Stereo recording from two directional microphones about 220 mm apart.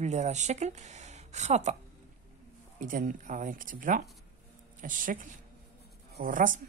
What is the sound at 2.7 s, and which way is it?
A woman's voice, 35° right (ahead or behind).